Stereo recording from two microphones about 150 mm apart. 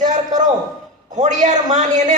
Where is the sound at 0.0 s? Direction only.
55° right (ahead or behind).